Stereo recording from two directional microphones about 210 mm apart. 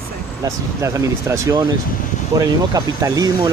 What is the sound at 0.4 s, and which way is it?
Speech, 15° right (ahead or behind).